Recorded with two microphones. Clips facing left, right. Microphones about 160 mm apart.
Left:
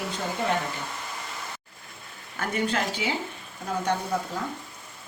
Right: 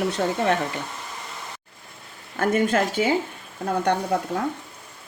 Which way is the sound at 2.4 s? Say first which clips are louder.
Right 7 dB; 50° right (ahead or behind).